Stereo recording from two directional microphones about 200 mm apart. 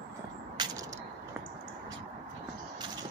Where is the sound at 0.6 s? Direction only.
20° right (ahead or behind).